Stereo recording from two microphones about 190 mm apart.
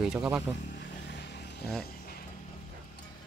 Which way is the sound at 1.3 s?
60° left (ahead or behind).